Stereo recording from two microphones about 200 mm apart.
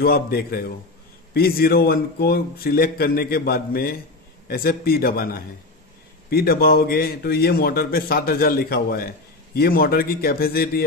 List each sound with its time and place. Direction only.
0.0 s a man's voice: 50° left (ahead or behind)